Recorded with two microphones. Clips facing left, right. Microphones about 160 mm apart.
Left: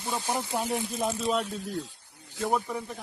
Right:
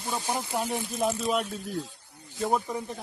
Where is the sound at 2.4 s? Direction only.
20° right (ahead or behind).